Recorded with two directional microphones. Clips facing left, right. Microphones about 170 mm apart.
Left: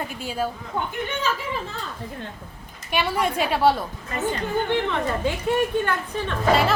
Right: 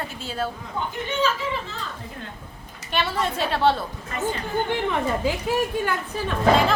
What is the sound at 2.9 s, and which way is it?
Speech, 10° left (ahead or behind).